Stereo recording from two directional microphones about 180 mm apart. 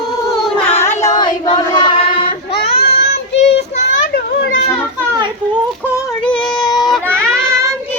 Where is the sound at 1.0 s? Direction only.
20° left (ahead or behind).